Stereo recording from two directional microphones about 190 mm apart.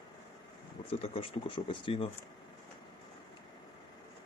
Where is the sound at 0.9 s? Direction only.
30° left (ahead or behind).